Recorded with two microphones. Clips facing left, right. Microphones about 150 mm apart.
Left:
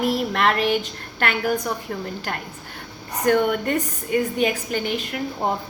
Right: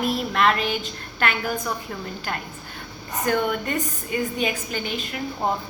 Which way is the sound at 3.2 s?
60° left (ahead or behind).